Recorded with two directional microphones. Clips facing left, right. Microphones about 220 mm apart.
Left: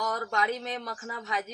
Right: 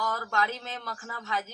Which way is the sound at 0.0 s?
20° left (ahead or behind).